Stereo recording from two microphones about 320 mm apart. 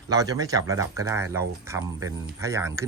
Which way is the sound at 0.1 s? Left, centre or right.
Centre.